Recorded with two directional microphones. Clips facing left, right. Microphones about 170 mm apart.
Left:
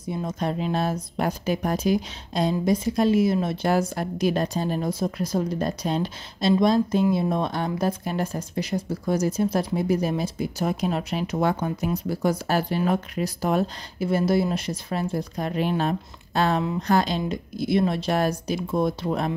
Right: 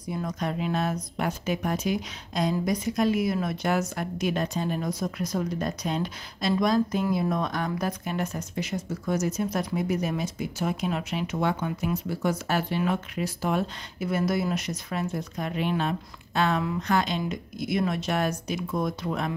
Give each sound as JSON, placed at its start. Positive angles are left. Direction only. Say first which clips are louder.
{"t": 0.0, "sound": "speech", "louder": "left 3 dB", "side_deg": 25}
{"t": 14.0, "sound": "speech", "louder": "left 4 dB", "side_deg": 30}